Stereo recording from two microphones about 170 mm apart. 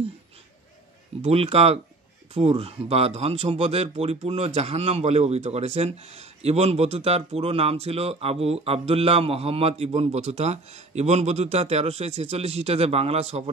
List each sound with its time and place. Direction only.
1.2 s speech: 35° right (ahead or behind)